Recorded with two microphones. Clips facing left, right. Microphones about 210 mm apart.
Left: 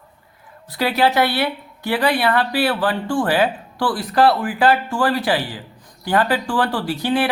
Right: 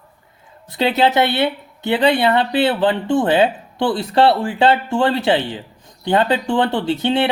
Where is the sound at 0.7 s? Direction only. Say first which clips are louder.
Right 2 dB; 20° right (ahead or behind).